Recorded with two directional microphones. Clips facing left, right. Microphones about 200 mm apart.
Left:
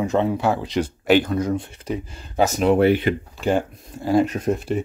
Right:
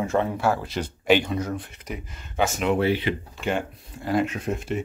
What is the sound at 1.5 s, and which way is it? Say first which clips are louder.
Speech: left 7 dB; 30° left (ahead or behind).